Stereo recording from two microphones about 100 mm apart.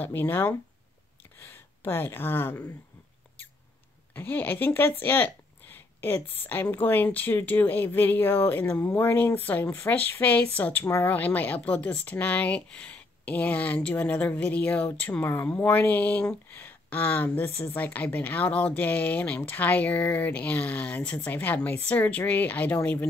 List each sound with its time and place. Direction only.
0.0 s speech: 20° left (ahead or behind)
4.1 s speech: 20° left (ahead or behind)